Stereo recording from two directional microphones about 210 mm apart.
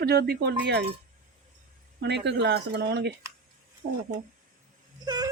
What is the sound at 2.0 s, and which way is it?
Speech, 55° right (ahead or behind).